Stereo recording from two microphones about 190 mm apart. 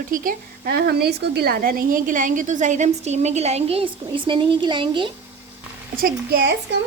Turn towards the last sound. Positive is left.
turn(degrees=-55)  # may be behind; listen again after turning